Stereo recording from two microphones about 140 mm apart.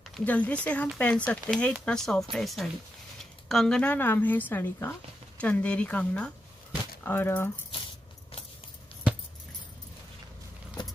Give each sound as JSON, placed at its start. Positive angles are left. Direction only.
{"t": 0.1, "sound": "speech", "side_deg": 10}